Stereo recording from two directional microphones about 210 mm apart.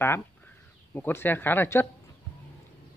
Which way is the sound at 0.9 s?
10° left (ahead or behind).